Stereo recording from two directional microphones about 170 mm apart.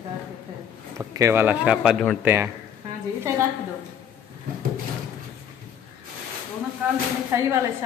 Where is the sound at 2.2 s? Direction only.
10° right (ahead or behind).